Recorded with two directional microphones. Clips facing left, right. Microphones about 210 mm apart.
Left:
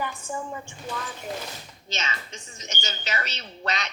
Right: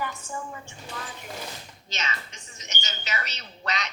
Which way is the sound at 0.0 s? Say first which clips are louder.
Left 2 dB; 20° left (ahead or behind).